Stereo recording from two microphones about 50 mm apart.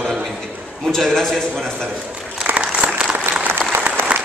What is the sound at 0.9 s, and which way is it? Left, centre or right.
Speech, centre.